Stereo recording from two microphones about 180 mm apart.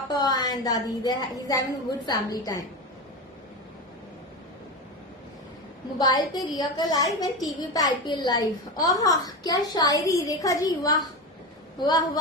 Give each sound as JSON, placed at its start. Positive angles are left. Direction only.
{"t": 0.1, "sound": "a woman's voice", "side_deg": 20}
{"t": 6.0, "sound": "a woman's voice", "side_deg": 20}